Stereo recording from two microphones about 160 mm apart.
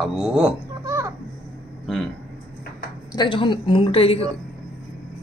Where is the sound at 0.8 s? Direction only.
20° right (ahead or behind).